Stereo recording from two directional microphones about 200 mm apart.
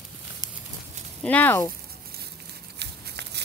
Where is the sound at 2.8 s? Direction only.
55° right (ahead or behind).